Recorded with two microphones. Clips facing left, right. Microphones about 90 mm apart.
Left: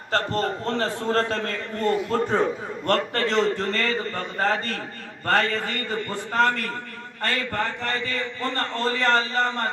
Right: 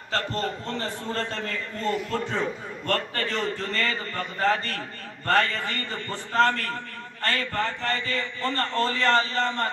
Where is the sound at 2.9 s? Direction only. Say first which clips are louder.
Left 5 dB; 75° left (ahead or behind).